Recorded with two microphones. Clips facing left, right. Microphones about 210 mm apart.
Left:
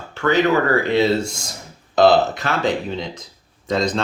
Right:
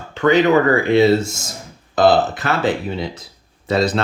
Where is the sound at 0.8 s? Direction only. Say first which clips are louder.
Right 4 dB; 10° right (ahead or behind).